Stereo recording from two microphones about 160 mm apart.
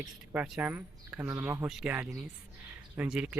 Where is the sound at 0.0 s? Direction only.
5° right (ahead or behind).